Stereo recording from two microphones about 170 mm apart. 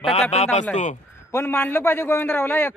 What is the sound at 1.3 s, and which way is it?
A man's voice, 15° left (ahead or behind).